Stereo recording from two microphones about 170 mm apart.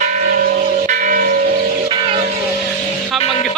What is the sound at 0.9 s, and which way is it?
Church bell, 55° right (ahead or behind).